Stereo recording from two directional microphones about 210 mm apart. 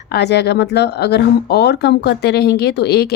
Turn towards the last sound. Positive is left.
turn(degrees=50)  # may be behind; listen again after turning